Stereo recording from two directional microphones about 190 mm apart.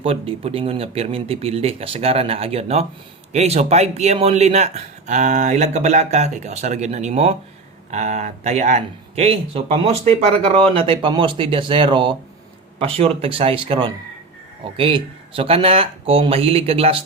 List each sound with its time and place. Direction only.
0.0 s speech: 30° right (ahead or behind)